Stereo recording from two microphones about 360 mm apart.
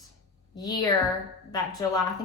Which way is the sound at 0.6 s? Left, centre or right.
Centre.